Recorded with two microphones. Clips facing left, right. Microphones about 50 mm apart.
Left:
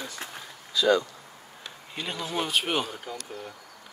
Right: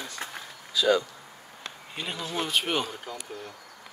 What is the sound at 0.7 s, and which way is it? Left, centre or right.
Speech, centre.